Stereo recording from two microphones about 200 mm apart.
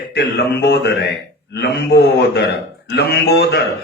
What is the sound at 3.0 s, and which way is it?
Speech, 55° left (ahead or behind).